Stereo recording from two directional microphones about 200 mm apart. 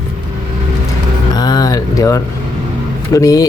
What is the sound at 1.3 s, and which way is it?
Speech, 20° left (ahead or behind).